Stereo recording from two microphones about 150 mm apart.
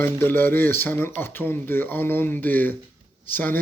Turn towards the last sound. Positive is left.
turn(degrees=10)  # may be behind; listen again after turning